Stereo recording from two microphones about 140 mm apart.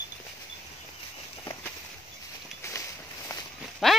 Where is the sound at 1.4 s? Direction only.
20° left (ahead or behind).